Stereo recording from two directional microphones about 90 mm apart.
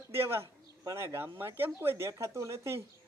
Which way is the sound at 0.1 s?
30° right (ahead or behind).